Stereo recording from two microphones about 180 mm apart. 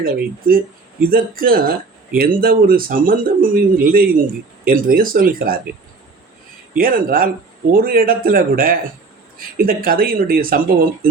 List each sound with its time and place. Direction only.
0.4 s speech: 55° right (ahead or behind)
6.7 s speech: 55° right (ahead or behind)